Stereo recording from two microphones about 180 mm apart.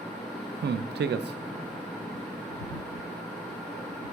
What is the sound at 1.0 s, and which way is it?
Speech, 70° right (ahead or behind).